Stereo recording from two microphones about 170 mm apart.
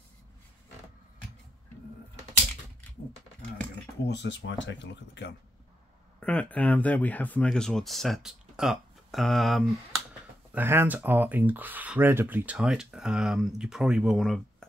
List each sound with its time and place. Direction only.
4.1 s speech: 90° left
6.1 s speech: 10° left (ahead or behind)
10.5 s speech: 15° right (ahead or behind)